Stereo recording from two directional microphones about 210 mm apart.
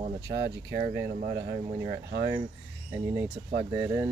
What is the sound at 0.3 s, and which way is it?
Speech, 35° right (ahead or behind).